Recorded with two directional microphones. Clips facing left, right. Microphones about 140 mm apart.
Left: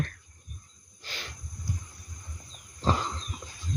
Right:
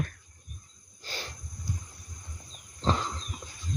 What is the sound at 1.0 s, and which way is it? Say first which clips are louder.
Insect: right 3 dB; 35° right (ahead or behind).